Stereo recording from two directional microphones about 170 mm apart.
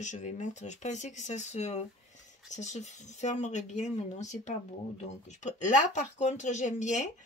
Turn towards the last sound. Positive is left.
turn(degrees=45)  # may be behind; listen again after turning